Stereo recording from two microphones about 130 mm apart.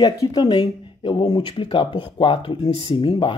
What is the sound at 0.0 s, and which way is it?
Speech, 30° left (ahead or behind).